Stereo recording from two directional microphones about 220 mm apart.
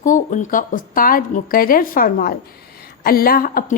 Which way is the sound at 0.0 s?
35° left (ahead or behind).